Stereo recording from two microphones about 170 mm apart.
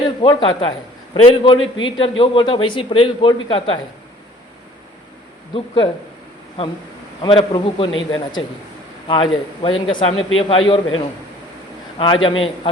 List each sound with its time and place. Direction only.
0.2 s a man's voice: 30° left (ahead or behind)
5.5 s a man's voice: 30° left (ahead or behind)
7.2 s a man's voice: 25° left (ahead or behind)